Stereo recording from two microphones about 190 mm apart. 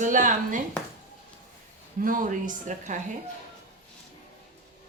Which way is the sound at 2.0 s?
45° right (ahead or behind).